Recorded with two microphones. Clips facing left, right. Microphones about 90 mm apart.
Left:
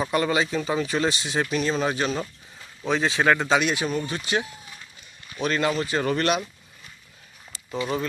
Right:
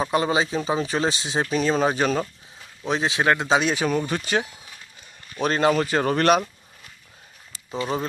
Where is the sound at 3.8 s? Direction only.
50° right (ahead or behind).